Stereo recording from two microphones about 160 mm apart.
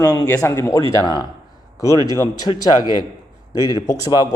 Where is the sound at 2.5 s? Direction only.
25° left (ahead or behind).